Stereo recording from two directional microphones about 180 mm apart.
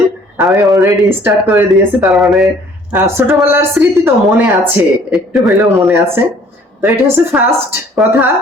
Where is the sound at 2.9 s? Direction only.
10° right (ahead or behind).